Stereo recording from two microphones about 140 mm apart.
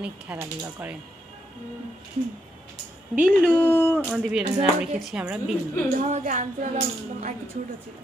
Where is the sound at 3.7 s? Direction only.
15° left (ahead or behind).